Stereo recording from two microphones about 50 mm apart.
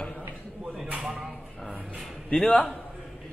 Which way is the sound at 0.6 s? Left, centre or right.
Centre.